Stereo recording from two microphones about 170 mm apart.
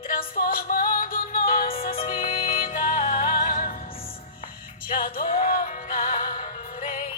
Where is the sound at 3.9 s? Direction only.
35° left (ahead or behind).